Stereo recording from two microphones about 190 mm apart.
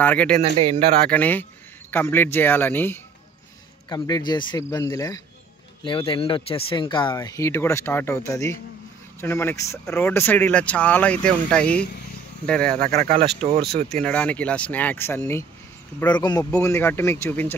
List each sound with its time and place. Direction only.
0.0 s speech: 10° left (ahead or behind)
13.2 s speech: 30° right (ahead or behind)
13.8 s speech: 5° left (ahead or behind)